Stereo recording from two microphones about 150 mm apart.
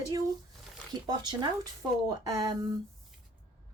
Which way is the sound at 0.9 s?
30° right (ahead or behind).